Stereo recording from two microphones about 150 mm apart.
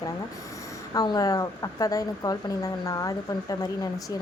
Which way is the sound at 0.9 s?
25° left (ahead or behind).